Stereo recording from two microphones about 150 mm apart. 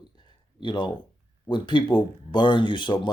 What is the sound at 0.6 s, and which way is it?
Speech, 30° left (ahead or behind).